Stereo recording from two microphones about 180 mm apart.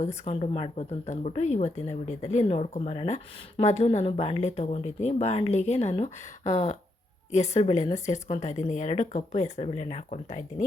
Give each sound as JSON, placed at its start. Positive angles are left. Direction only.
{"t": 0.3, "sound": "speech", "side_deg": 35}